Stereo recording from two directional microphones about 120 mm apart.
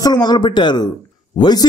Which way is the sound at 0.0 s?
35° left (ahead or behind).